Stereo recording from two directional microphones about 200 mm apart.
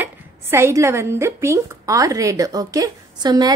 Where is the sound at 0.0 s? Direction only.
15° right (ahead or behind).